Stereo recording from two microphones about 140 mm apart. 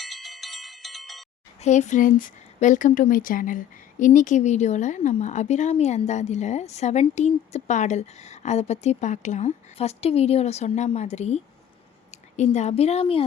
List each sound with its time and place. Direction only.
0.0 s bell: centre (ahead or behind)
1.6 s a woman's voice: 55° left (ahead or behind)